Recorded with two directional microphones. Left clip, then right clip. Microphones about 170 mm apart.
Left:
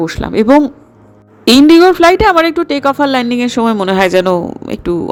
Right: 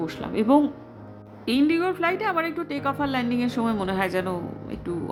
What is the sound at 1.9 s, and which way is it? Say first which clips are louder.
Speech: left 17 dB; 55° left (ahead or behind).